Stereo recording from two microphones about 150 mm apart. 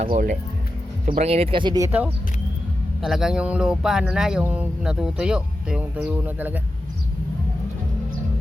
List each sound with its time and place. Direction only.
0.1 s speech: 65° right (ahead or behind)
1.2 s speech: 40° right (ahead or behind)
3.0 s speech: centre (ahead or behind)